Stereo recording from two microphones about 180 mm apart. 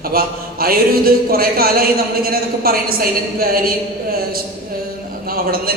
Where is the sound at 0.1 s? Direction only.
55° right (ahead or behind).